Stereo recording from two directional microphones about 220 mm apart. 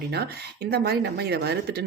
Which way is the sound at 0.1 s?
45° right (ahead or behind).